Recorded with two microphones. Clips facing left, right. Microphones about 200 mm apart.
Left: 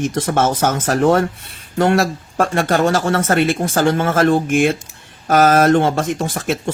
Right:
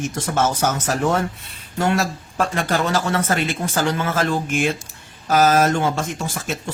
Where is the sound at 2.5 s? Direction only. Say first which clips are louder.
Left 6 dB; 50° left (ahead or behind).